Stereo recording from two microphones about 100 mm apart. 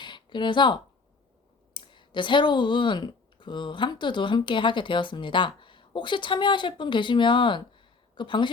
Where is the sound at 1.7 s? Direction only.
55° left (ahead or behind).